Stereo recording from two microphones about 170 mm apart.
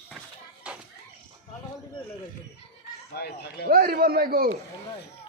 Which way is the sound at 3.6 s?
65° right (ahead or behind).